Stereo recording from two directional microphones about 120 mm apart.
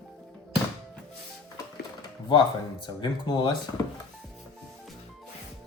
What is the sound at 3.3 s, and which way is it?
Speech, 40° left (ahead or behind).